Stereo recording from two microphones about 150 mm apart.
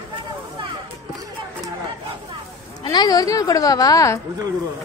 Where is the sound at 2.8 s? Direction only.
25° left (ahead or behind).